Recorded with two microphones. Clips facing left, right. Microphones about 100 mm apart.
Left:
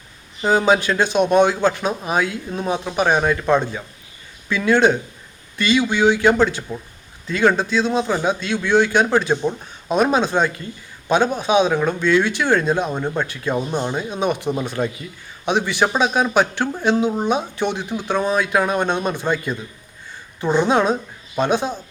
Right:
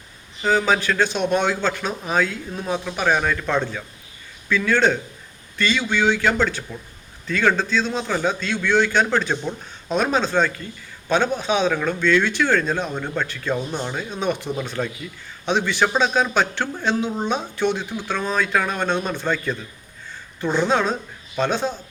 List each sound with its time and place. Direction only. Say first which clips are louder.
0.4 s speech: left 3 dB; 20° left (ahead or behind)